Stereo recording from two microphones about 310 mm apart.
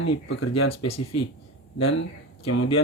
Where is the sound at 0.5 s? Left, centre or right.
Left.